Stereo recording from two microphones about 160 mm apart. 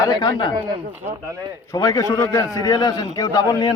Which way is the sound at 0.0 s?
25° left (ahead or behind).